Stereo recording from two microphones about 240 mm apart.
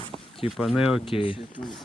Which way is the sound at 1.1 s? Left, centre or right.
Left.